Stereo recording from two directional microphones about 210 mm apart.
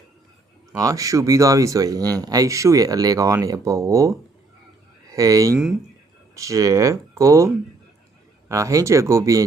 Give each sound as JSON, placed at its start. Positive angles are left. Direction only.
{"t": 0.7, "sound": "speech", "side_deg": -15}
{"t": 5.1, "sound": "speech", "side_deg": -15}